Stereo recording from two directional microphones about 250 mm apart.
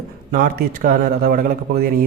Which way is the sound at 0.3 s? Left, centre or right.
Right.